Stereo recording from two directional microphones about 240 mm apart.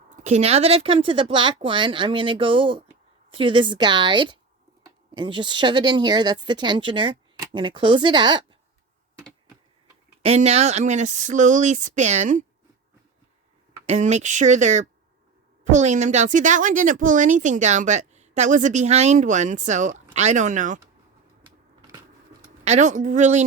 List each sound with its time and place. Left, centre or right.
0.3 s speech: right
10.2 s speech: right
13.8 s speech: right
22.6 s speech: right